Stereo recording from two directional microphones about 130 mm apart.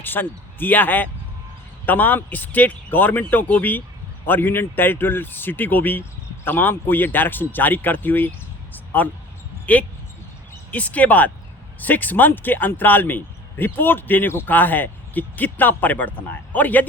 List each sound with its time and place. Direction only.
0.0 s a man's voice: 15° left (ahead or behind)
8.7 s a sound: 15° left (ahead or behind)
9.7 s a man's voice: 10° left (ahead or behind)